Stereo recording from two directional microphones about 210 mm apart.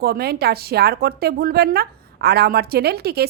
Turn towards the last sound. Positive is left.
turn(degrees=-50)  # may be behind; listen again after turning